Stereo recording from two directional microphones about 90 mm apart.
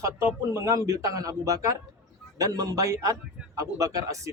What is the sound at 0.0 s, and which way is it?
A man's voice, 30° right (ahead or behind).